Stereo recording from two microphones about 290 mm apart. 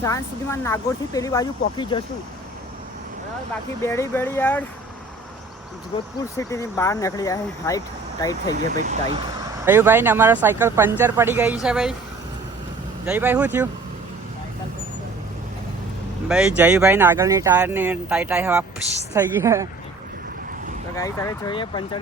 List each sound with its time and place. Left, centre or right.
0.0 s speech: centre
3.8 s speech: centre
6.3 s speech: centre
8.7 s speech: right
9.6 s speech: centre
13.1 s speech: centre
16.3 s speech: centre
20.9 s speech: centre